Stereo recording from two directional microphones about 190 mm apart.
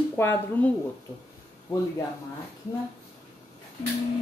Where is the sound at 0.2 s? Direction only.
15° left (ahead or behind).